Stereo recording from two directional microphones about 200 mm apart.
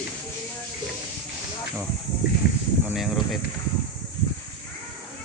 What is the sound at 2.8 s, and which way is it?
Speech, centre (ahead or behind).